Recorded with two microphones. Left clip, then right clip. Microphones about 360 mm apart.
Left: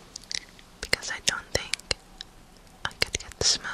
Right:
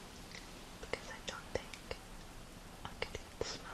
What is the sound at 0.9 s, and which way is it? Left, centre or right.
Whispering, left.